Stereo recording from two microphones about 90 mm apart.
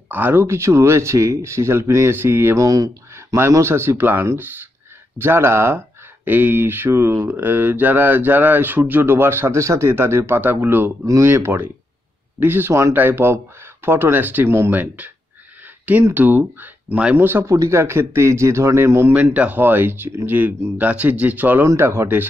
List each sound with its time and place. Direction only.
0.1 s speech: 25° right (ahead or behind); by 3.3 s 40° right (ahead or behind)
3.3 s speech: 30° right (ahead or behind)
11.1 s speech: 35° right (ahead or behind)
17.5 s speech: 35° right (ahead or behind)
19.3 s speech: 15° right (ahead or behind)